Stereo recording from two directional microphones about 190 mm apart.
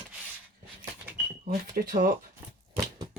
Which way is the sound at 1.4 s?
50° right (ahead or behind).